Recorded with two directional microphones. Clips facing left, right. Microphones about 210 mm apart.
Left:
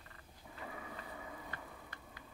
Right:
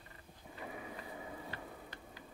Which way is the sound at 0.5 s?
20° right (ahead or behind).